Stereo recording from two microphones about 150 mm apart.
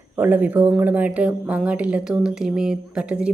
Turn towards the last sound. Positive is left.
turn(degrees=-5)  # may be behind; listen again after turning